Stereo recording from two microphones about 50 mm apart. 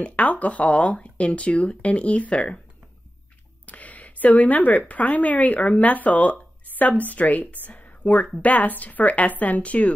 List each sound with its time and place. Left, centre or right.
0.0 s speech: left
3.6 s a woman's voice: left